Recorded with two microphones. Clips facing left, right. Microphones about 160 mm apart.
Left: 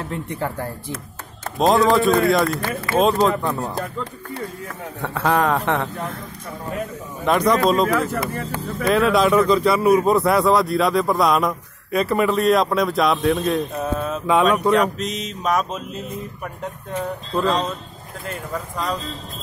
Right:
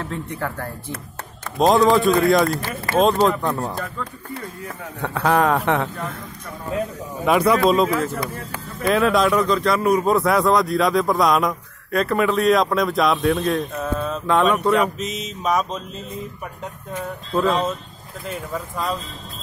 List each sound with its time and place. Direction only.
0.1 s speech: 15° left (ahead or behind)
1.6 s speech: centre (ahead or behind)
3.8 s speech: 25° left (ahead or behind)
5.0 s speech: centre (ahead or behind)
7.2 s speech: 5° right (ahead or behind)
17.3 s speech: 5° right (ahead or behind)